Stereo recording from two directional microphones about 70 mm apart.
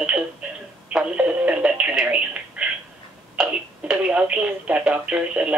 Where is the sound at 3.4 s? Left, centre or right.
Centre.